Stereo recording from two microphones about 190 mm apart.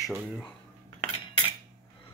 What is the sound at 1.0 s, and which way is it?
Cutlery, 25° left (ahead or behind).